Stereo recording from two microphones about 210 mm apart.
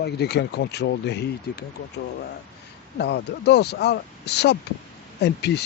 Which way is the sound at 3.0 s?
50° left (ahead or behind).